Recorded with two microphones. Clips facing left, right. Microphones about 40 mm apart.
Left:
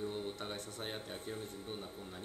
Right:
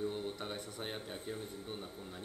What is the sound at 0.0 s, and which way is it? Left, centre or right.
Speech, centre.